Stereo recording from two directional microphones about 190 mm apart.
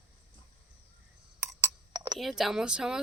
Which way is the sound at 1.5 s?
20° right (ahead or behind).